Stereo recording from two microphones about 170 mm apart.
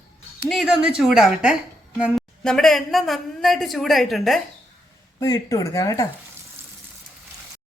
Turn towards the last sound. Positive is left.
turn(degrees=20)  # may be behind; listen again after turning